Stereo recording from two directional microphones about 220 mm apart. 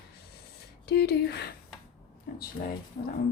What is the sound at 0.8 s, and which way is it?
Speech, 45° left (ahead or behind).